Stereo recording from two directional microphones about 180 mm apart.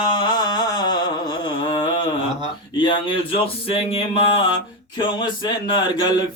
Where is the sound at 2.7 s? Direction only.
25° left (ahead or behind).